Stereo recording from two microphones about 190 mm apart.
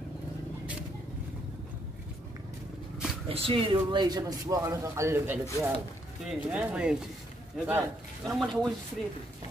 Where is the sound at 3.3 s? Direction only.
30° right (ahead or behind); by 7.8 s 10° right (ahead or behind).